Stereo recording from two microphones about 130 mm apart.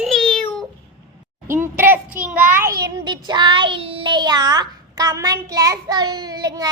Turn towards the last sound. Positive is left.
turn(degrees=-30)  # may be behind; listen again after turning